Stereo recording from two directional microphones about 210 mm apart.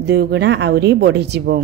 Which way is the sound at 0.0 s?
50° right (ahead or behind).